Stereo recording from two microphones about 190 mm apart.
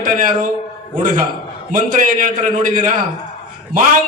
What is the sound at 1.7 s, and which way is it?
Speech, 45° right (ahead or behind).